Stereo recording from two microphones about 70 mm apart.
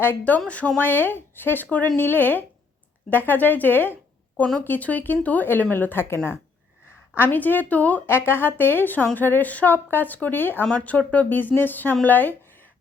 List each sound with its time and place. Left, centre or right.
0.0 s a woman's voice: left
7.2 s speech: left
10.7 s speech: centre